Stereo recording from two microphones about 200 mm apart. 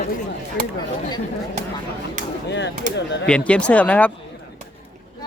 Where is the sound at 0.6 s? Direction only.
45° right (ahead or behind).